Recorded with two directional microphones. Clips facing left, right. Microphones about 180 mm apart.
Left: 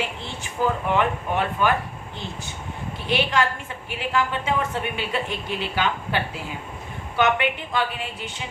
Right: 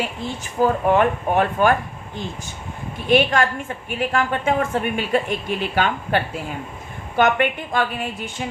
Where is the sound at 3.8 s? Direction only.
50° right (ahead or behind).